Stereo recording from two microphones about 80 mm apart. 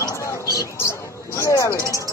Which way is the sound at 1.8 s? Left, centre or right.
Left.